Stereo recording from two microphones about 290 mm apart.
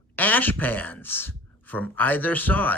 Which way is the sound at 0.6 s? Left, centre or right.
Centre.